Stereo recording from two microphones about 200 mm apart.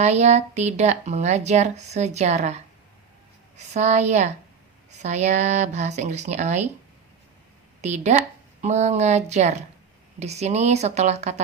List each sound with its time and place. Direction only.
0.0 s speech: 35° right (ahead or behind)
3.8 s speech: 35° right (ahead or behind)
7.8 s speech: 35° right (ahead or behind)